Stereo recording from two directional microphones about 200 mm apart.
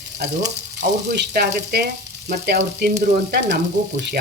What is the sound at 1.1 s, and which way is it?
Frying, 55° right (ahead or behind).